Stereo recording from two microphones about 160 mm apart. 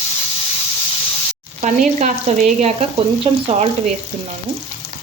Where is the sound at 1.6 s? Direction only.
45° right (ahead or behind).